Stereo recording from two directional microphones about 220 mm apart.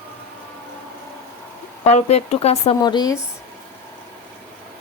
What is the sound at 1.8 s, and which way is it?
Speech, 30° left (ahead or behind).